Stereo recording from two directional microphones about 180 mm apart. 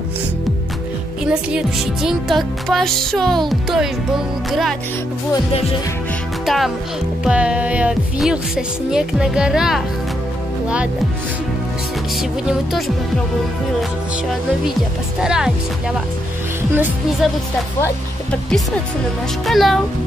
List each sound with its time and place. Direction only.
1.2 s speech: 5° right (ahead or behind)
5.3 s speech: 30° left (ahead or behind)
6.4 s speech: centre (ahead or behind)
12.2 s speech: centre (ahead or behind)
15.1 s speech: 5° right (ahead or behind)
16.7 s music: 10° right (ahead or behind)
17.7 s speech: 15° left (ahead or behind)
19.4 s speech: centre (ahead or behind)